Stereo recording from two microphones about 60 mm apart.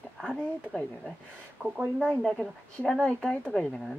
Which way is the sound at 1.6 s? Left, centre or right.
Right.